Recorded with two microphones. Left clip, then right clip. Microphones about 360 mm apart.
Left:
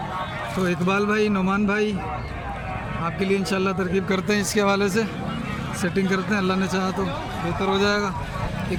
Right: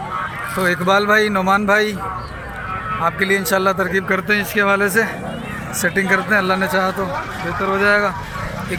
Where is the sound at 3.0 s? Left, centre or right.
Centre.